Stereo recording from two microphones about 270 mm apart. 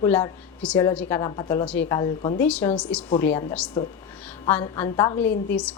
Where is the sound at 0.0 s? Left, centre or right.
Centre.